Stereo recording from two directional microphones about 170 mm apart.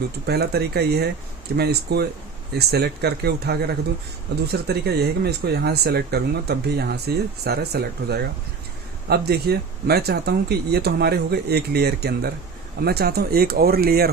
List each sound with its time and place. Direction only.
0.3 s speech: 70° right (ahead or behind)